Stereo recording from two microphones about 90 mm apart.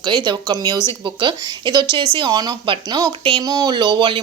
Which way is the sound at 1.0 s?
65° right (ahead or behind).